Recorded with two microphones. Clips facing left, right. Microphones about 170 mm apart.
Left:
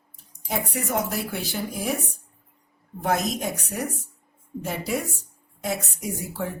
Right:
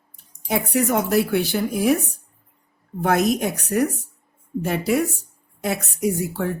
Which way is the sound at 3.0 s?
65° right (ahead or behind).